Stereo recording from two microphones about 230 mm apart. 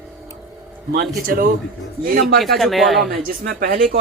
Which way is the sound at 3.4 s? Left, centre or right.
Right.